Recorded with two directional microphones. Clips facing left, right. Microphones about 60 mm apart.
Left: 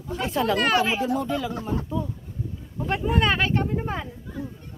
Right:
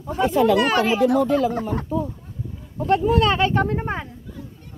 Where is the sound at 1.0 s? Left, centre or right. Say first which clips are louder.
Right 7 dB; right.